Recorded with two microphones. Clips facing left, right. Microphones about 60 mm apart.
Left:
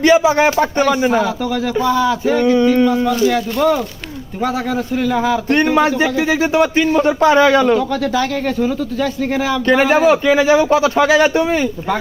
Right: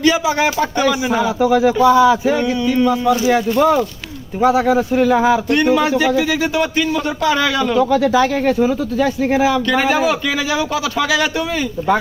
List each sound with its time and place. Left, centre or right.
0.0 s a man's voice: left
1.2 s speech: centre
5.5 s a man's voice: left
7.8 s speech: centre
9.6 s speech: left